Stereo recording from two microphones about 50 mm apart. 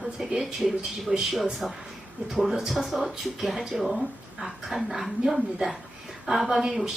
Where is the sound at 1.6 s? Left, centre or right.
Centre.